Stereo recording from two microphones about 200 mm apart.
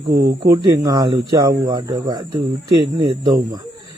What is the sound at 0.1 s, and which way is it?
Speech, 55° right (ahead or behind).